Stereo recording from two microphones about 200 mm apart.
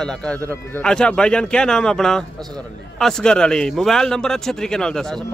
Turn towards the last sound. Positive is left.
turn(degrees=0)  # may be behind; listen again after turning